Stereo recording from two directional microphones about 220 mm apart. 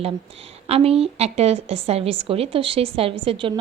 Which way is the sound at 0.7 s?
25° right (ahead or behind).